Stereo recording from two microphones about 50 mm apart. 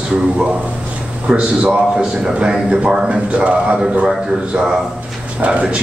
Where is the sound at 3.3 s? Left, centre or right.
Right.